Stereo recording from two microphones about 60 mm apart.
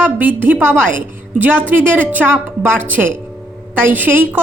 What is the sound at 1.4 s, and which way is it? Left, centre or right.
A woman's voice, right.